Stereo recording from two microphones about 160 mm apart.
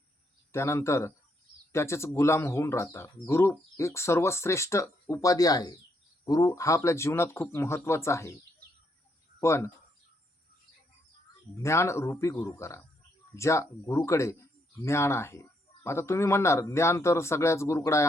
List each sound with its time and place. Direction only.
0.5 s speech: 15° left (ahead or behind)
9.4 s speech: 15° left (ahead or behind)
11.6 s speech: 15° left (ahead or behind)